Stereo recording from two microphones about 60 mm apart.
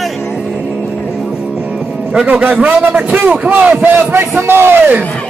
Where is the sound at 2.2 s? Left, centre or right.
Right.